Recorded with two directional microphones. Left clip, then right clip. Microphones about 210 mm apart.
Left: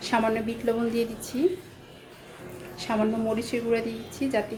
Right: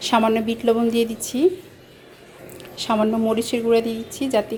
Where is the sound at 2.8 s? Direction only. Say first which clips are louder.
Right 7 dB; 35° right (ahead or behind).